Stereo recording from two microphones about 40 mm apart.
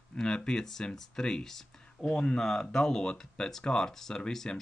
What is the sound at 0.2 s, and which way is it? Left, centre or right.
Speech, centre.